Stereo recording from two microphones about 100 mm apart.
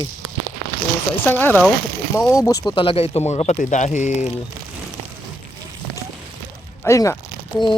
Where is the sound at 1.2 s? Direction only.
20° left (ahead or behind).